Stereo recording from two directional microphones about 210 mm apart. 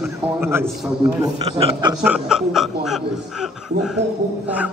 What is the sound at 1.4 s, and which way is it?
Speech, 30° right (ahead or behind).